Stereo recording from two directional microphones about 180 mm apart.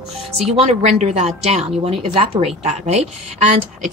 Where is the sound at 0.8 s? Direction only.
40° right (ahead or behind).